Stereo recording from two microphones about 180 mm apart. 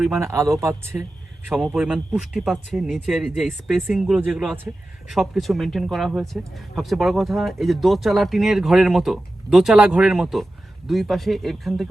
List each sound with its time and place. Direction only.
0.2 s speech: 15° right (ahead or behind)
1.5 s speech: centre (ahead or behind)